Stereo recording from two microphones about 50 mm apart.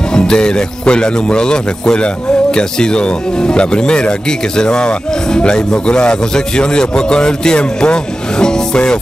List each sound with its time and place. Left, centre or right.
0.1 s speech: centre